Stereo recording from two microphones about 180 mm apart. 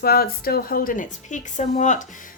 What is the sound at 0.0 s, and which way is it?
A woman's voice, 55° left (ahead or behind).